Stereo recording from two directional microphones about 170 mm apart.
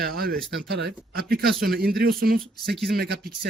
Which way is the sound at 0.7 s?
80° right.